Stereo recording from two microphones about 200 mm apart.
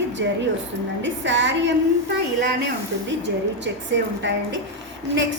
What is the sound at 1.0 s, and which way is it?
A woman's voice, 65° right (ahead or behind).